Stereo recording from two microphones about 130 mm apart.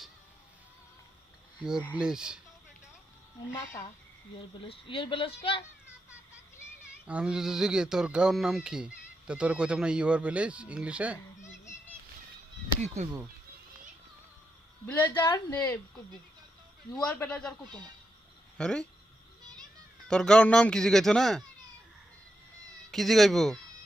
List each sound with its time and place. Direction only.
1.5 s speech: 5° right (ahead or behind)
3.5 s speech: 20° left (ahead or behind)
4.4 s a child's voice: 40° left (ahead or behind)
7.1 s speech: 5° right (ahead or behind)
14.8 s a woman's voice: 15° left (ahead or behind)
17.2 s a woman's voice: 5° left (ahead or behind)
18.5 s speech: 5° left (ahead or behind)
20.1 s speech: 5° left (ahead or behind)
22.9 s speech: centre (ahead or behind)